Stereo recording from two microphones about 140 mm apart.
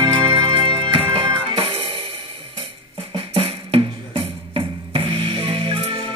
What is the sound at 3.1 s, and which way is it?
Music, 40° right (ahead or behind).